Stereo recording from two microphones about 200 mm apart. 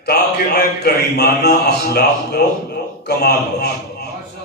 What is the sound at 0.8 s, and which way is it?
A man's voice, 50° left (ahead or behind).